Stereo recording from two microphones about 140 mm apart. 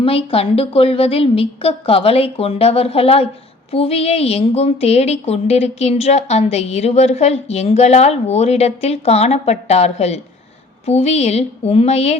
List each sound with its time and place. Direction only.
0.0 s speech: 45° left (ahead or behind)